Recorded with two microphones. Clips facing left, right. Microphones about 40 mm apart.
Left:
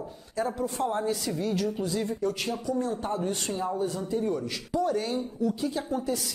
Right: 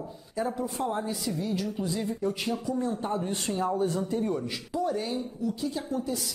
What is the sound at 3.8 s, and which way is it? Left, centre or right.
Speech, right.